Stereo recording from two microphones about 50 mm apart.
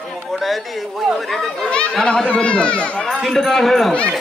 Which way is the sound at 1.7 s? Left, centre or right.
Left.